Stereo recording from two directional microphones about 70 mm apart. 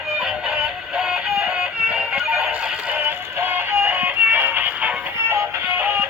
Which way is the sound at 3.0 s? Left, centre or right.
Right.